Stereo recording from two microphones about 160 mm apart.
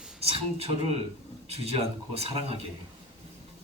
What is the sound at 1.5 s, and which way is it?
Speech, 40° right (ahead or behind).